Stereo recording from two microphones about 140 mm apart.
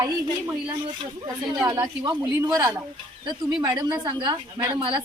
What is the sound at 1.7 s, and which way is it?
Speech, 35° right (ahead or behind).